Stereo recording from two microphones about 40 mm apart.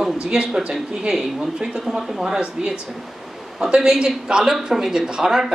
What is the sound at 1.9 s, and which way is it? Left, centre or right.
A woman's voice, centre.